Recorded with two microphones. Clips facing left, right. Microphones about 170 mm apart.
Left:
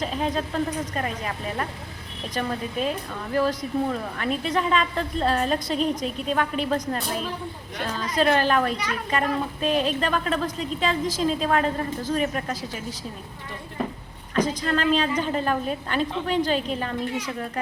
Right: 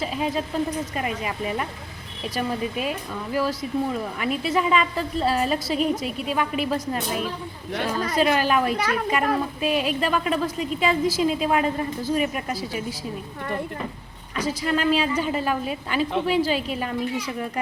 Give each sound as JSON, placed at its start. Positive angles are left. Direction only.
{"t": 0.0, "sound": "a woman's voice", "side_deg": -5}
{"t": 8.7, "sound": "a child's voice", "side_deg": -50}
{"t": 9.6, "sound": "a woman's voice", "side_deg": -10}
{"t": 14.3, "sound": "a woman's voice", "side_deg": -10}